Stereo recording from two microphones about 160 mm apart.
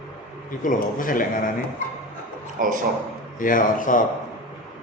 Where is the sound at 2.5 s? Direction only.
55° right (ahead or behind).